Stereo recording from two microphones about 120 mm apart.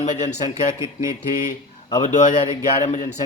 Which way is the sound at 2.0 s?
80° left.